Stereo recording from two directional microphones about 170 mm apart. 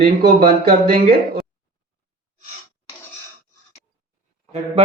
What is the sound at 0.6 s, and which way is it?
Speech, 65° right (ahead or behind).